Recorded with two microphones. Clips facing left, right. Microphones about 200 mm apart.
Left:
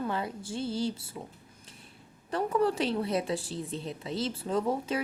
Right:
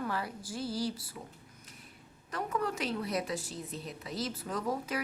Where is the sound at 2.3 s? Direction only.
30° left (ahead or behind).